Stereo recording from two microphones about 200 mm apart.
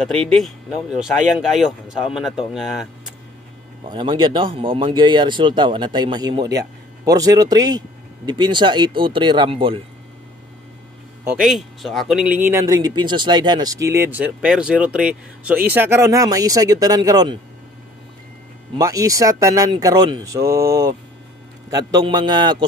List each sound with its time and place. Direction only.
0.0 s speech: centre (ahead or behind)
3.8 s a man's voice: 25° right (ahead or behind)
11.2 s speech: centre (ahead or behind); by 17.4 s 20° right (ahead or behind)
18.8 s a man's voice: 15° right (ahead or behind)